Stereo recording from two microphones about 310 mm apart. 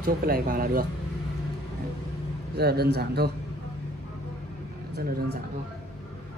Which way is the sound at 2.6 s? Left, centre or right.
Right.